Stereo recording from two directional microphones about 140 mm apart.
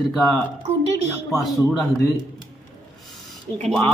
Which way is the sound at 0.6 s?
50° right (ahead or behind).